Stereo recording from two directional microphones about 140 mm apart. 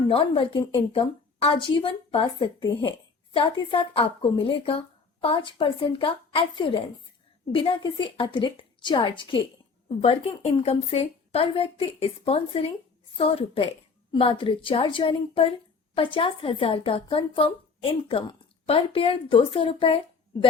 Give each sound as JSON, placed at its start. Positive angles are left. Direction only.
{"t": 0.1, "sound": "a woman's voice", "side_deg": 40}
{"t": 10.6, "sound": "a woman's voice", "side_deg": 45}